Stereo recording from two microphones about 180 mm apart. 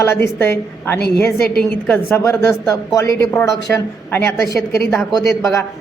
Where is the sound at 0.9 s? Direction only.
60° left (ahead or behind).